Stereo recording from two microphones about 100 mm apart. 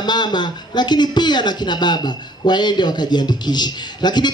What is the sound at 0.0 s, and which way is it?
Speech, 45° left (ahead or behind).